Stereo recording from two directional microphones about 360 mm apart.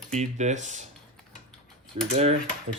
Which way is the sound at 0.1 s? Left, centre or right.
Centre.